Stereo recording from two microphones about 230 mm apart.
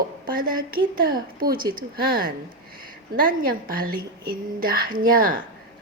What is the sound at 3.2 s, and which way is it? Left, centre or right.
A woman's voice, right.